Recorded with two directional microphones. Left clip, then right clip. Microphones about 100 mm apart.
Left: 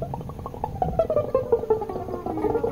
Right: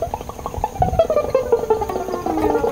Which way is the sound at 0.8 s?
55° left (ahead or behind).